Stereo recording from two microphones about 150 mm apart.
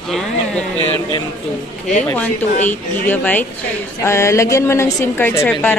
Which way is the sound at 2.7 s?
10° left (ahead or behind).